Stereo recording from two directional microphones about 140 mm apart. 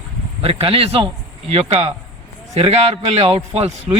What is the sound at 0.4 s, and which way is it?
A man's voice, 40° right (ahead or behind).